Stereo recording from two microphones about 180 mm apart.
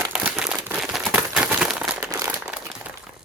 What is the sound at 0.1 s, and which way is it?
Crumpling, 5° right (ahead or behind).